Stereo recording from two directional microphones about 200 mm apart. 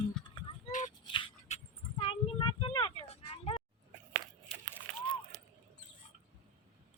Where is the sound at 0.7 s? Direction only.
40° left (ahead or behind).